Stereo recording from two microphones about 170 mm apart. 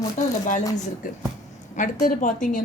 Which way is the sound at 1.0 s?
50° left (ahead or behind).